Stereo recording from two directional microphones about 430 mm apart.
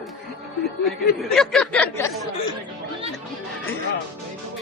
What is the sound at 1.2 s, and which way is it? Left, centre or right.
A man's voice, centre.